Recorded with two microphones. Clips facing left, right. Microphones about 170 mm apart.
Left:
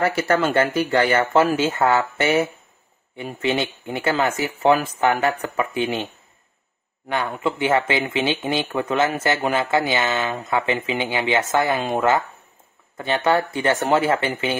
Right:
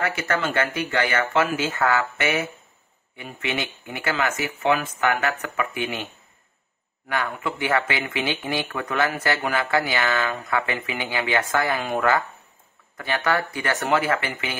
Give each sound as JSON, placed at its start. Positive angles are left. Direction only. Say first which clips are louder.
{"t": 0.0, "sound": "speech", "louder": "left 5 dB", "side_deg": 30}
{"t": 7.1, "sound": "speech", "louder": "left 4 dB", "side_deg": 25}